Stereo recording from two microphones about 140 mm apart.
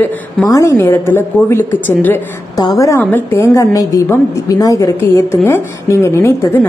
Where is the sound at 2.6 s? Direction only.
25° left (ahead or behind).